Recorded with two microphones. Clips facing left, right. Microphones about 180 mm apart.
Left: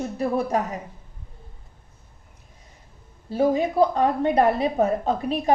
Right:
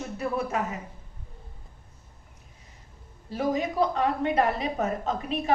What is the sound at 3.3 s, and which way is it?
A woman's voice, 30° left (ahead or behind).